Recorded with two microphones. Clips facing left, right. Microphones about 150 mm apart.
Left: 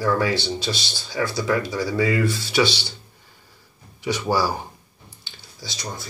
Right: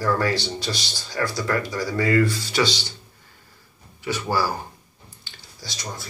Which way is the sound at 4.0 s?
15° left (ahead or behind).